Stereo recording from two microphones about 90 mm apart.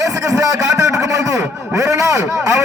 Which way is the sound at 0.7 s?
40° right (ahead or behind).